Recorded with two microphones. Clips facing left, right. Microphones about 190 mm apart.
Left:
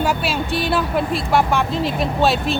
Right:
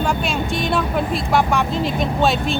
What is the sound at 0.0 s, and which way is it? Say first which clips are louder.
Speech: even; 5° left (ahead or behind).